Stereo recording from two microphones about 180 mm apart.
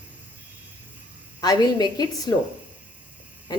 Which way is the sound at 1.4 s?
20° left (ahead or behind).